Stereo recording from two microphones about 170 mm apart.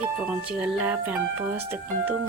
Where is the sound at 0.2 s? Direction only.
10° right (ahead or behind).